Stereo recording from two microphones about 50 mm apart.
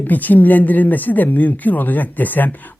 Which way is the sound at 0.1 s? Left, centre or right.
Left.